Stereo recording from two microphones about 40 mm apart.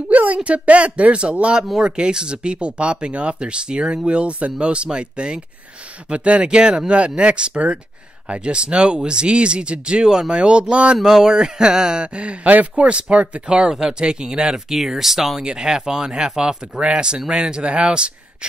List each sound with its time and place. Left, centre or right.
0.1 s a sound: right
0.4 s speech: right
11.0 s speech: centre
14.7 s speech: centre
15.4 s speech: centre